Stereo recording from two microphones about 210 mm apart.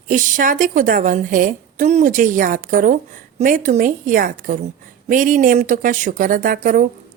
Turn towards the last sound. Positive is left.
turn(degrees=-40)  # may be behind; listen again after turning